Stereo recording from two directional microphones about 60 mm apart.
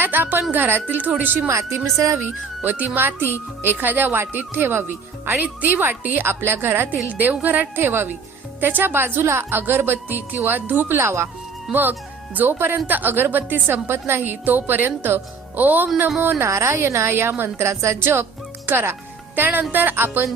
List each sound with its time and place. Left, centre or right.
0.0 s a woman's voice: right
11.7 s speech: right
16.4 s a woman's voice: right